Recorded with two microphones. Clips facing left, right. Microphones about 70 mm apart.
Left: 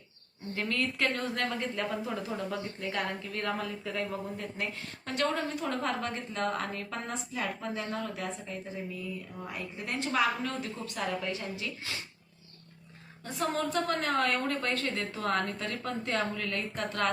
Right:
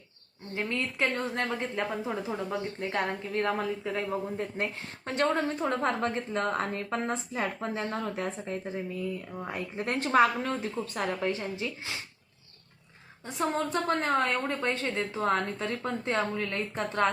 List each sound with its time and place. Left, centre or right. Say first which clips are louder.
0.5 s a woman's voice: even; right
13.2 s a woman's voice: right 2 dB; right